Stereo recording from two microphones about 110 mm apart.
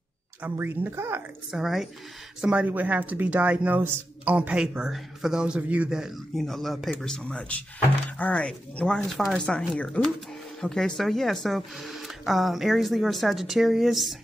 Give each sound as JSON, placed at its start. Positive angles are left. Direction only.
{"t": 0.4, "sound": "speech", "side_deg": -20}
{"t": 1.5, "sound": "speech", "side_deg": -5}